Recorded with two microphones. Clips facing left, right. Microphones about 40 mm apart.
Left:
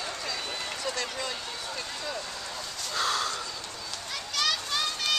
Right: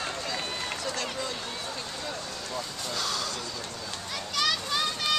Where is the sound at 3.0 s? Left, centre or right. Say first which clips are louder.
Left 5 dB; left.